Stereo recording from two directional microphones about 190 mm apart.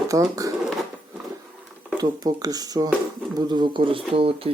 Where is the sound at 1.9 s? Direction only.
20° right (ahead or behind).